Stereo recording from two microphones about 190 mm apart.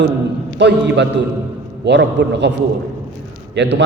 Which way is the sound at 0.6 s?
65° right (ahead or behind).